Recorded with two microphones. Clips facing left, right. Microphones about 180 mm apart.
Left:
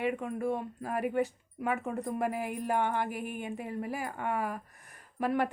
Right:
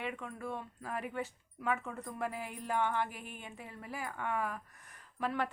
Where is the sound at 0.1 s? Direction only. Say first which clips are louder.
Left 9 dB; 55° left (ahead or behind).